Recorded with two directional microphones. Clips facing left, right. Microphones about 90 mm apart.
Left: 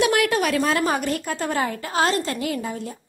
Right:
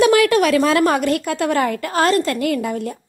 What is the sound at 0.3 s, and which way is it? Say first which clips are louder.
Speech: right 6 dB; 90° right.